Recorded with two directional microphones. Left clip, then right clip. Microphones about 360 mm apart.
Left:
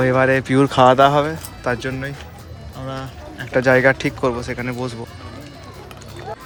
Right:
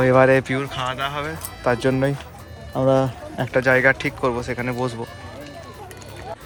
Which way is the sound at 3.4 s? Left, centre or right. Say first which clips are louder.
Left 2 dB; centre.